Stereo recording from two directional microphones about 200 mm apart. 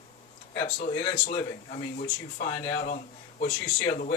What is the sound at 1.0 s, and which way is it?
Speech, 30° left (ahead or behind).